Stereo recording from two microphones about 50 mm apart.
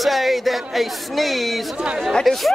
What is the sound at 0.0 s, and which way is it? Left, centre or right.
Speech, centre.